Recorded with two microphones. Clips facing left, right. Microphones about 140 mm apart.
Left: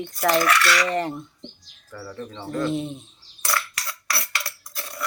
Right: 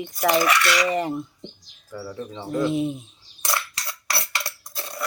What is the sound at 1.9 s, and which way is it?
Dishes, 10° right (ahead or behind).